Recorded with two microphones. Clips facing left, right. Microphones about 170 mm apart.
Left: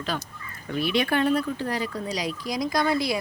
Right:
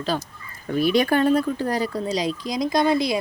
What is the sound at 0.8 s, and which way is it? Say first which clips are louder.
Speech: right 5 dB; 40° right (ahead or behind).